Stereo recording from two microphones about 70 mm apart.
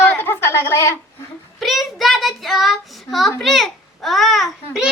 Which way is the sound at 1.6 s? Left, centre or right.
Centre.